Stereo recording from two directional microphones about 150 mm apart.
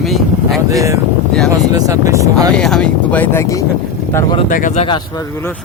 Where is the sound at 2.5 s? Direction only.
5° left (ahead or behind).